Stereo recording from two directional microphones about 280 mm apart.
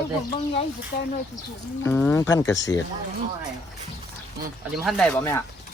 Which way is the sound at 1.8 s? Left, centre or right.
Centre.